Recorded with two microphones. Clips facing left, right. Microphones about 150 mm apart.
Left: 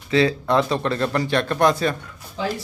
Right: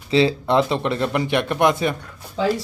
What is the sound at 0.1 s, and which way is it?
Speech, 25° right (ahead or behind).